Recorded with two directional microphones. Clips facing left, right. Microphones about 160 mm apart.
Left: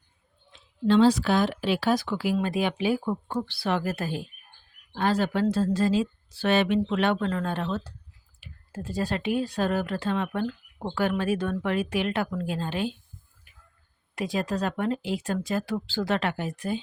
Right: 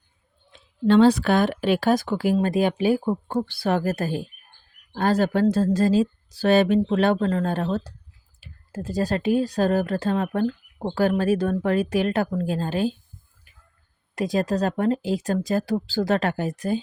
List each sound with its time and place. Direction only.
0.5 s speech: 55° right (ahead or behind)
14.2 s speech: 40° right (ahead or behind)